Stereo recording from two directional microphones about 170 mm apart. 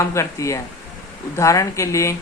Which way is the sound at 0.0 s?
15° left (ahead or behind).